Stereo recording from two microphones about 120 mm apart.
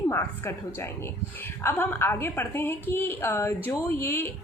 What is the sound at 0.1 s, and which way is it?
A woman's voice, 20° left (ahead or behind).